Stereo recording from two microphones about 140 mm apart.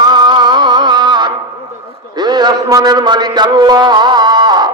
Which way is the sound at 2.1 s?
30° right (ahead or behind).